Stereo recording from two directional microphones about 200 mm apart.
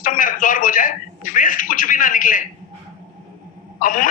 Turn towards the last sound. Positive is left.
turn(degrees=40)  # may be behind; listen again after turning